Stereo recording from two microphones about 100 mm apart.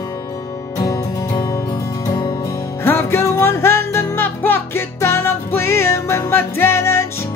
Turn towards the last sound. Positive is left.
turn(degrees=25)  # may be behind; listen again after turning